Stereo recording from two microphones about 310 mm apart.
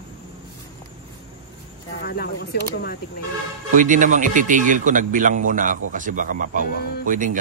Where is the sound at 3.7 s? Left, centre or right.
Right.